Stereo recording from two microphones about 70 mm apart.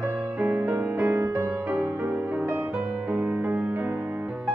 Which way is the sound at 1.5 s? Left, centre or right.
Right.